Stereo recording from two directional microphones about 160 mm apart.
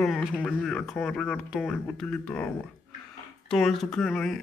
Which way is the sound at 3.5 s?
5° left (ahead or behind).